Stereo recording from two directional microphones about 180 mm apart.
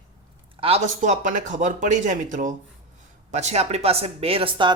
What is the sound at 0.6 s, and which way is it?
Speech, 40° right (ahead or behind).